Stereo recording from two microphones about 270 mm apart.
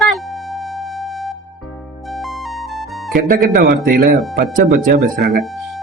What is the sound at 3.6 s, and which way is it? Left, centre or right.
A man's voice, right.